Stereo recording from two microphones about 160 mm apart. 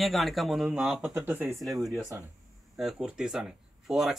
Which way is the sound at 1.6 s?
Centre (ahead or behind).